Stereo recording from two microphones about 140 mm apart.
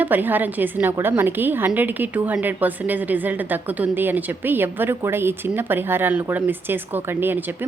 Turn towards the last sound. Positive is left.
turn(degrees=-15)  # may be behind; listen again after turning